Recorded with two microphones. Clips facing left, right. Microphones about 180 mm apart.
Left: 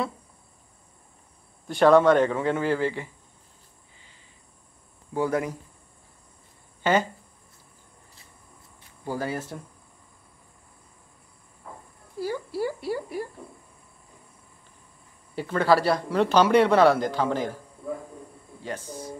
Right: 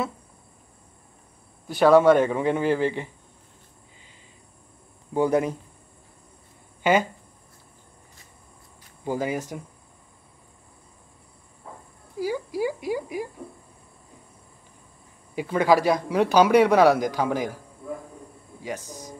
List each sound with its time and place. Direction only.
1.7 s a man's voice: 5° right (ahead or behind)
5.1 s speech: 20° right (ahead or behind)
6.8 s speech: 10° right (ahead or behind)
9.0 s a man's voice: 15° right (ahead or behind)
12.2 s a sound: 10° right (ahead or behind)
15.3 s a man's voice: 15° right (ahead or behind)
18.9 s a man's voice: 15° right (ahead or behind)